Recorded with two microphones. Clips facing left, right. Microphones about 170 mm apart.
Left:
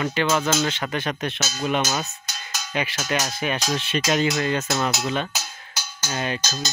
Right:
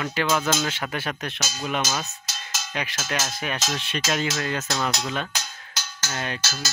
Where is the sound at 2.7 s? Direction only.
Centre (ahead or behind).